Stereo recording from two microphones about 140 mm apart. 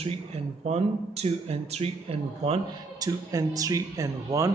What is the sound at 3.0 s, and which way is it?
A man's voice, 25° right (ahead or behind).